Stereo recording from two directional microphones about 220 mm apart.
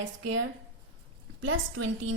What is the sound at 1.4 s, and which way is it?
Speech, 75° right (ahead or behind).